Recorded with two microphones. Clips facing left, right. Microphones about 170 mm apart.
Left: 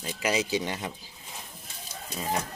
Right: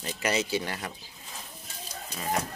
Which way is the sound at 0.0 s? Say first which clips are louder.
Left 1 dB; 10° left (ahead or behind).